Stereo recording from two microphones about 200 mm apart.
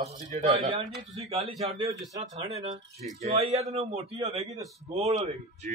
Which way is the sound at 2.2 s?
30° right (ahead or behind).